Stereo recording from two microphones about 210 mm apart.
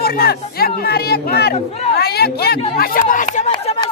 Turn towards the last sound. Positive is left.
turn(degrees=20)  # may be behind; listen again after turning